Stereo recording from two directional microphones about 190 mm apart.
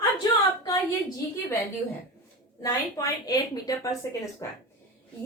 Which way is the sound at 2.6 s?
20° left (ahead or behind).